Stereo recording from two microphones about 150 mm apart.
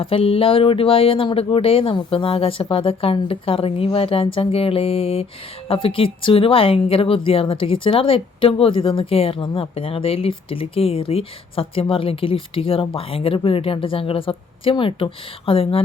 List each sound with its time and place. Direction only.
0.0 s speech: 35° left (ahead or behind)